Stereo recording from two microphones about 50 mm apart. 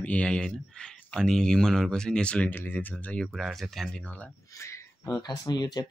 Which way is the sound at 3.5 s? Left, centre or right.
Centre.